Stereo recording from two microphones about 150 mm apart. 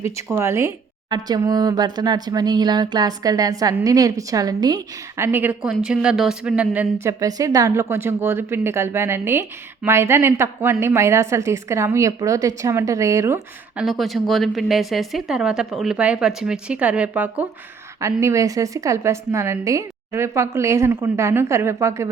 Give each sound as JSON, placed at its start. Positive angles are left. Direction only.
{"t": 0.0, "sound": "a woman's voice", "side_deg": -20}
{"t": 6.7, "sound": "a woman's voice", "side_deg": -20}
{"t": 13.7, "sound": "a woman's voice", "side_deg": 0}
{"t": 18.0, "sound": "a woman's voice", "side_deg": -20}